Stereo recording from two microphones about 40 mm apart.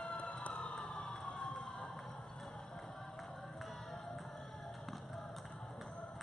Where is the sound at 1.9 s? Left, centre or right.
Centre.